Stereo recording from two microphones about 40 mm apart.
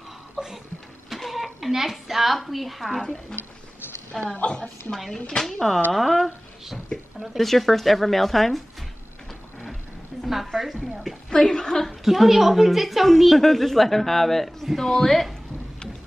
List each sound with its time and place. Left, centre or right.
0.4 s a sound: centre
1.1 s a woman's voice: centre
4.1 s a woman's voice: centre
5.4 s a woman's voice: centre
10.2 s a woman's voice: centre
11.2 s a woman's voice: centre
12.0 s a woman's voice: centre